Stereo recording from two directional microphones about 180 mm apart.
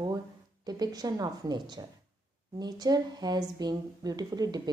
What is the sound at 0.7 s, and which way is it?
A woman's voice, 20° right (ahead or behind).